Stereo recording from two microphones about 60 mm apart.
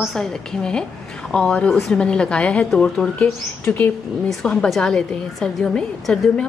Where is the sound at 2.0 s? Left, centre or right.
Centre.